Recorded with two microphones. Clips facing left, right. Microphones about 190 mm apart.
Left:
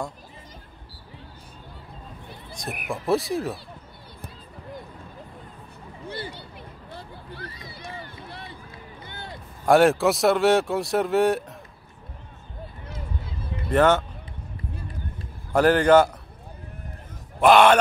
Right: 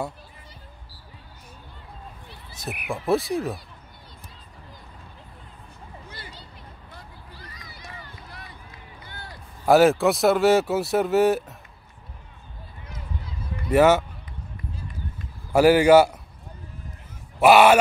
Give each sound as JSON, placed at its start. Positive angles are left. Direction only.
{"t": 2.5, "sound": "speech", "side_deg": -5}
{"t": 6.0, "sound": "speech", "side_deg": 30}
{"t": 7.4, "sound": "a sound", "side_deg": 30}
{"t": 9.7, "sound": "speech", "side_deg": 0}
{"t": 13.7, "sound": "a man's voice", "side_deg": -10}
{"t": 15.5, "sound": "a man's voice", "side_deg": -10}
{"t": 17.4, "sound": "a man's voice", "side_deg": -10}